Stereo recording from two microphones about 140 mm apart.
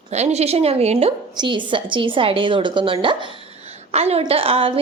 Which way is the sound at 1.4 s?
35° right (ahead or behind).